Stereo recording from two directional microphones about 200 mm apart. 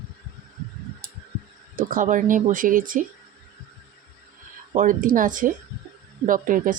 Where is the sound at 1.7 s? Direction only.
40° right (ahead or behind).